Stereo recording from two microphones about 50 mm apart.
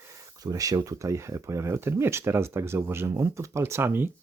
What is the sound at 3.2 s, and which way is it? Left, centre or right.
Speech, right.